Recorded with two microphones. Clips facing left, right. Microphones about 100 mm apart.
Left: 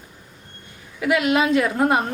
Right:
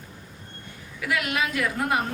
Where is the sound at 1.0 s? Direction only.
25° left (ahead or behind).